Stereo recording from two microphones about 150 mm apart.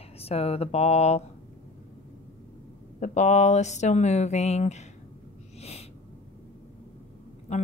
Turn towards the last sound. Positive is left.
turn(degrees=50)  # may be behind; listen again after turning